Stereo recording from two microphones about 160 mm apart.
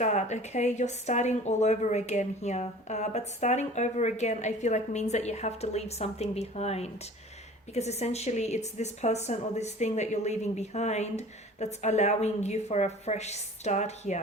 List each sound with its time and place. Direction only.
0.0 s speech: 45° left (ahead or behind)